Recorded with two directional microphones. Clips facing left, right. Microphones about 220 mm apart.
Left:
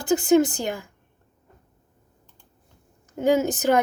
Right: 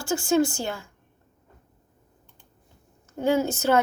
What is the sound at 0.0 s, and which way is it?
Speech, 20° left (ahead or behind).